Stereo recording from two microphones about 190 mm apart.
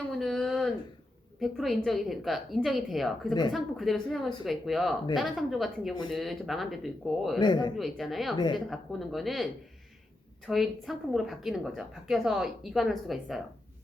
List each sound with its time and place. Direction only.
0.2 s a sound: centre (ahead or behind)
1.4 s a woman's voice: centre (ahead or behind)
7.3 s a man's voice: 25° left (ahead or behind)
7.8 s a woman's voice: centre (ahead or behind)
8.4 s a man's voice: 25° left (ahead or behind)
8.7 s a woman's voice: centre (ahead or behind)